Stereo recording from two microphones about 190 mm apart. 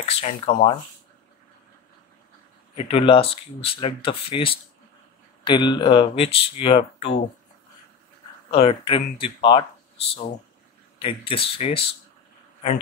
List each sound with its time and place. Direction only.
0.0 s speech: 35° left (ahead or behind)
2.7 s speech: 30° left (ahead or behind)
8.5 s speech: 30° left (ahead or behind)
11.0 s speech: 30° left (ahead or behind)